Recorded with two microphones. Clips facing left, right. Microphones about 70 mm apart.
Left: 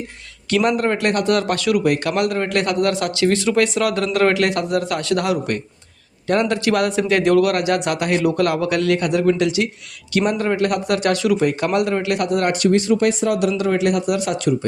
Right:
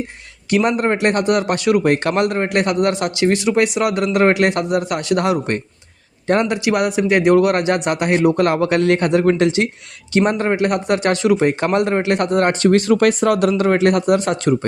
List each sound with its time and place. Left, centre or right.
0.5 s speech: right
1.8 s a man's voice: right
6.5 s speech: centre; by 12.7 s right
12.7 s speech: right